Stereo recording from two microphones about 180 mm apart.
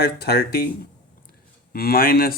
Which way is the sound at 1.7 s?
55° left (ahead or behind).